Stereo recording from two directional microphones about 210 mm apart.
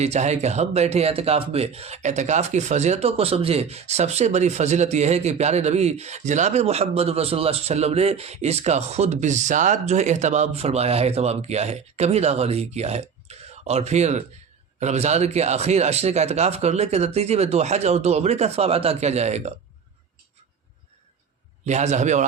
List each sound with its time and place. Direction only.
0.0 s speech: 30° right (ahead or behind)
21.7 s speech: 35° right (ahead or behind)